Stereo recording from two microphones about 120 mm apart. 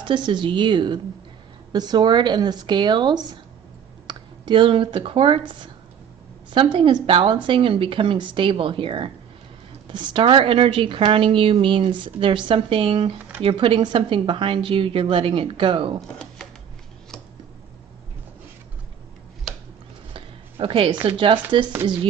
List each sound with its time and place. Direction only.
0.0 s speech: 40° right (ahead or behind)
6.5 s a woman's voice: 45° right (ahead or behind)
20.2 s speech: 45° right (ahead or behind)